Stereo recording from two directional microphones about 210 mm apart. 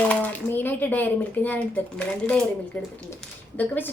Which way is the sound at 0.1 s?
10° left (ahead or behind).